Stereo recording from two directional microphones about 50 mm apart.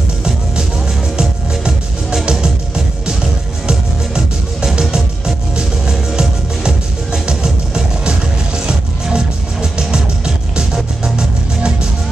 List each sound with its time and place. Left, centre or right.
3.6 s music: centre